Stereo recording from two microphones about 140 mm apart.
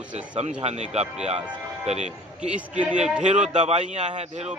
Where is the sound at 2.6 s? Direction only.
10° right (ahead or behind).